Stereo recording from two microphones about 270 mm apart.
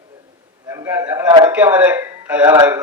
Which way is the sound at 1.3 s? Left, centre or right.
Centre.